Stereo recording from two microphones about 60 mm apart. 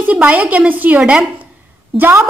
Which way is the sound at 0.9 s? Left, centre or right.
Centre.